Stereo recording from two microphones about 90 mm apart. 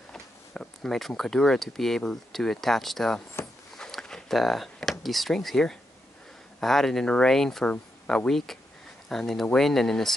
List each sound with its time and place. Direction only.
0.1 s speech: 5° left (ahead or behind)
3.4 s speech: 30° left (ahead or behind)
3.7 s a sound: 5° left (ahead or behind)
6.6 s speech: 5° left (ahead or behind)